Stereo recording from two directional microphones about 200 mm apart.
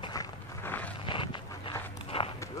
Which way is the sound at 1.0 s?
25° left (ahead or behind).